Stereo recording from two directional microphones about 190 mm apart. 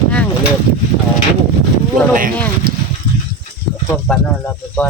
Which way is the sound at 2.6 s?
50° right (ahead or behind).